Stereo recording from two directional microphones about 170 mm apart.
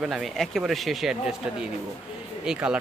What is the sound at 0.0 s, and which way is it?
Speech, centre (ahead or behind).